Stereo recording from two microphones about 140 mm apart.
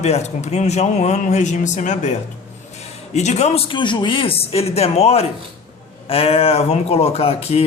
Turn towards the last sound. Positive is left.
turn(degrees=45)  # may be behind; listen again after turning